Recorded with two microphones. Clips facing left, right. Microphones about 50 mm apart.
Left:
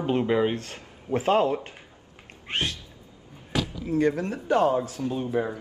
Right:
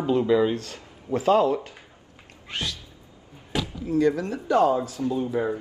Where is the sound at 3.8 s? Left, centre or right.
Left.